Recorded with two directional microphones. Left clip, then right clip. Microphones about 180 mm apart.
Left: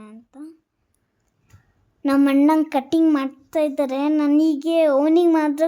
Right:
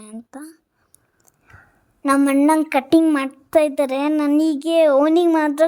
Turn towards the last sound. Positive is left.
turn(degrees=-25)  # may be behind; listen again after turning